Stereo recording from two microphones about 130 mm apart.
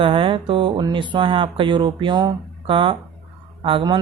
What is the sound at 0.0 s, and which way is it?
Speech, 40° right (ahead or behind).